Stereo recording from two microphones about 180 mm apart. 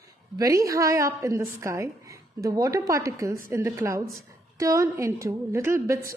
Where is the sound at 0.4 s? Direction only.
15° right (ahead or behind).